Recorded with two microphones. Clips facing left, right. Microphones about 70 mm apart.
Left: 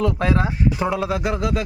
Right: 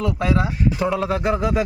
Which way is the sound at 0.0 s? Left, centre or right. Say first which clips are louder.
Left 1 dB; left.